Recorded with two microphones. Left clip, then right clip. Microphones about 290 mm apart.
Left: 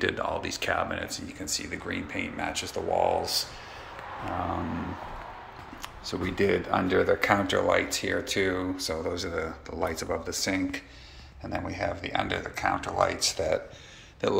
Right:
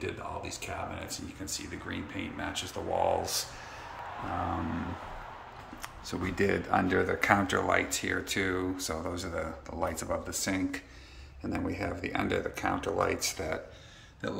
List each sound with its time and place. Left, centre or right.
0.0 s speech: centre
1.0 s speech: centre
5.8 s speech: centre
11.4 s speech: right